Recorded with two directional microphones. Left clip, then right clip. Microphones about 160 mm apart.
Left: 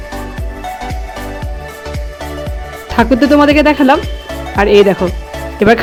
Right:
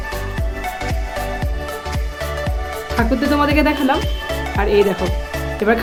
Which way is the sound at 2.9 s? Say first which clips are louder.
Left 9 dB; 50° left (ahead or behind).